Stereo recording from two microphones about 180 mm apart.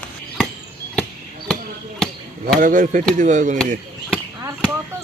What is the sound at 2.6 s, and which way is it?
Speech, 45° right (ahead or behind).